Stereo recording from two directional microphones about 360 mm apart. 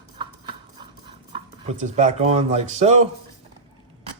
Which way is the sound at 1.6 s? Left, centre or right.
Centre.